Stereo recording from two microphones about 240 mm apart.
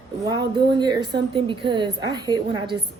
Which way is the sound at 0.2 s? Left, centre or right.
Centre.